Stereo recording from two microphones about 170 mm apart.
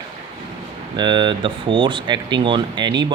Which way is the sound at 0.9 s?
25° right (ahead or behind).